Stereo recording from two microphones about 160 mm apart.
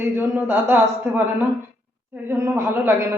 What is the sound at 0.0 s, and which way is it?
A woman's voice, 15° right (ahead or behind).